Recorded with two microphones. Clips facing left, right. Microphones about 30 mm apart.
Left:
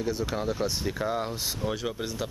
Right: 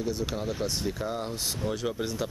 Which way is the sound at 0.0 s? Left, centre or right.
Centre.